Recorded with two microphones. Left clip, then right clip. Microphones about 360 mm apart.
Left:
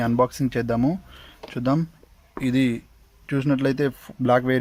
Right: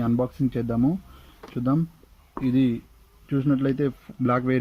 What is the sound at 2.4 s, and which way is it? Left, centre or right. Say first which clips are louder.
Speech: left 1 dB; centre.